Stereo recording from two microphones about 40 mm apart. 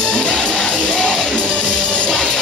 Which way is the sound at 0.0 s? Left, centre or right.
Left.